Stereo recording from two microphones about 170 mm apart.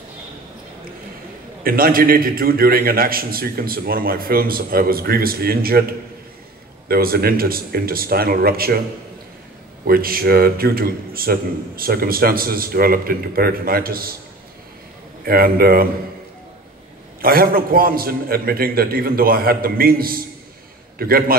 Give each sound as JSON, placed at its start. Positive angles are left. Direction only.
{"t": 1.6, "sound": "a man's voice", "side_deg": -60}
{"t": 9.8, "sound": "a man's voice", "side_deg": -60}
{"t": 15.2, "sound": "a man's voice", "side_deg": -60}
{"t": 17.2, "sound": "a man's voice", "side_deg": -60}